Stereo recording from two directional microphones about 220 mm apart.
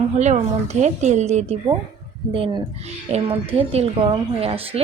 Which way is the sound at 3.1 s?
30° right (ahead or behind).